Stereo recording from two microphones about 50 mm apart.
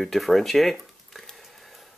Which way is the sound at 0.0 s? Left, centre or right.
Centre.